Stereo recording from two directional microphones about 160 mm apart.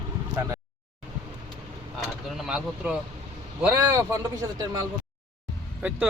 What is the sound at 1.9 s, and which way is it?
Speech, centre (ahead or behind).